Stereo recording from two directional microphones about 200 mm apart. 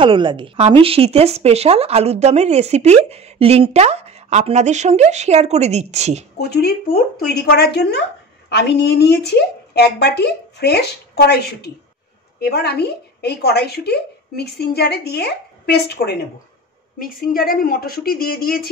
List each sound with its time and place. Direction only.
0.0 s speech: 25° right (ahead or behind)
6.3 s a woman's voice: 50° left (ahead or behind)